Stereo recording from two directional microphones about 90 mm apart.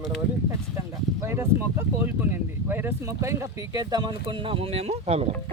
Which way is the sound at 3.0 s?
35° right (ahead or behind).